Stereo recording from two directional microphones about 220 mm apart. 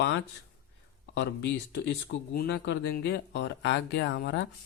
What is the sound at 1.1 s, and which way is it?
Speech, 55° left (ahead or behind).